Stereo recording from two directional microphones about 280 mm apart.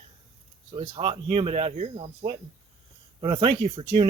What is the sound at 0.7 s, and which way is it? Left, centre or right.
Speech, centre.